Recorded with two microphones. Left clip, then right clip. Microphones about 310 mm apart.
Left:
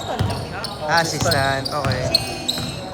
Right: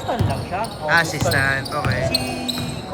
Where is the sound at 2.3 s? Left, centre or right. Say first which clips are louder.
Left 1 dB; centre.